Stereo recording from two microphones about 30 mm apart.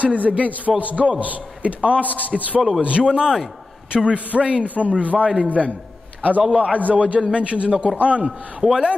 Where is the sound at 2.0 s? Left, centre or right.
Left.